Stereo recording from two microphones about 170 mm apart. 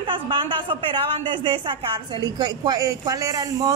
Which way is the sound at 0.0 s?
30° right (ahead or behind).